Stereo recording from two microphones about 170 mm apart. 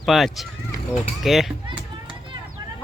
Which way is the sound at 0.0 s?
Centre (ahead or behind).